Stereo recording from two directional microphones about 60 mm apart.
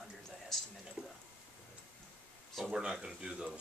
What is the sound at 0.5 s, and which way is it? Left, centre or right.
Speech, centre.